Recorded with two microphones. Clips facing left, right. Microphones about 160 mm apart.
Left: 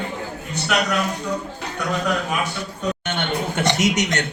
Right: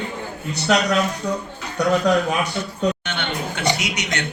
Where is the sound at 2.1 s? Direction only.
35° right (ahead or behind).